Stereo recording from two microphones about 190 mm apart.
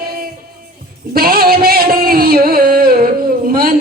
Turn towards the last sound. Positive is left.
turn(degrees=-50)  # may be behind; listen again after turning